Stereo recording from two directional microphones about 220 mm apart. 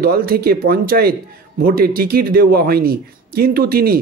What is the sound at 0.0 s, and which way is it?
A man's voice, 45° right (ahead or behind).